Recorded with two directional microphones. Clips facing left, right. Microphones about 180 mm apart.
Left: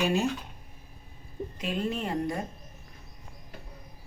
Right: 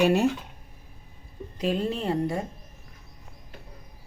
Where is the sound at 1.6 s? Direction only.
35° right (ahead or behind).